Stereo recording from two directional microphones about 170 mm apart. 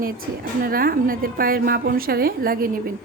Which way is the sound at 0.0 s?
60° right (ahead or behind).